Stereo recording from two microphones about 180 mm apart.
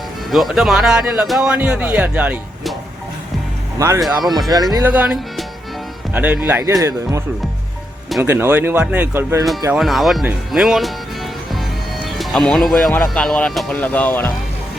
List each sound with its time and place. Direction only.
0.3 s speech: centre (ahead or behind)
3.8 s speech: 15° right (ahead or behind)
4.0 s speech: centre (ahead or behind); by 7.2 s 15° right (ahead or behind)
8.2 s speech: 10° right (ahead or behind)
9.7 s speech: centre (ahead or behind)
12.1 s speech: centre (ahead or behind)